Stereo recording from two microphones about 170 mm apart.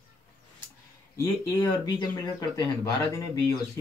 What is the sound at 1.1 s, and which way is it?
Speech, 20° left (ahead or behind).